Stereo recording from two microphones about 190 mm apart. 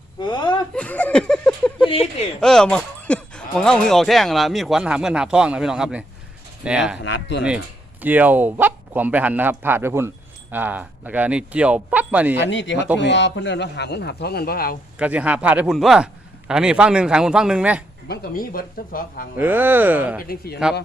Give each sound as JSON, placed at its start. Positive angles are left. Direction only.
{"t": 0.2, "sound": "a sound", "side_deg": 25}
{"t": 0.7, "sound": "chuckle", "side_deg": 5}
{"t": 1.8, "sound": "speech", "side_deg": 30}
{"t": 2.4, "sound": "speech", "side_deg": 5}
{"t": 7.0, "sound": "speech", "side_deg": 65}
{"t": 8.0, "sound": "speech", "side_deg": -10}
{"t": 12.4, "sound": "speech", "side_deg": 70}
{"t": 14.9, "sound": "speech", "side_deg": -5}
{"t": 18.1, "sound": "speech", "side_deg": 50}
{"t": 19.4, "sound": "speech", "side_deg": -10}
{"t": 20.2, "sound": "speech", "side_deg": 55}